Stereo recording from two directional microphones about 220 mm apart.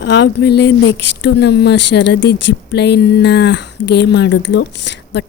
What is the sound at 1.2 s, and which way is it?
Speech, 50° left (ahead or behind).